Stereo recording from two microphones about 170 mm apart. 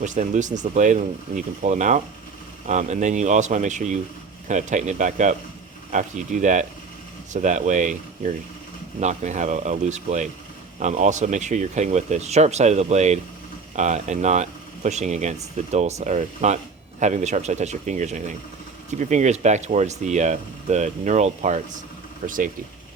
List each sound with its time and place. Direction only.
0.0 s speech: 45° right (ahead or behind)
9.0 s speech: 45° right (ahead or behind)